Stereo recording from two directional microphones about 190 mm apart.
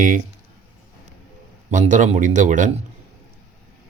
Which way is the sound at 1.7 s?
40° right (ahead or behind).